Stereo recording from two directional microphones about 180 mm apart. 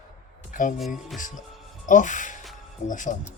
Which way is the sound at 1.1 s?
45° left (ahead or behind).